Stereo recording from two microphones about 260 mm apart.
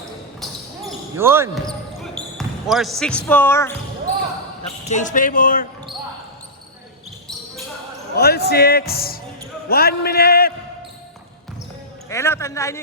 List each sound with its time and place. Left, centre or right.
0.4 s basketball bounce: centre
1.6 s basketball bounce: centre
4.9 s a man's voice: left
8.1 s a man's voice: left
12.0 s a man's voice: centre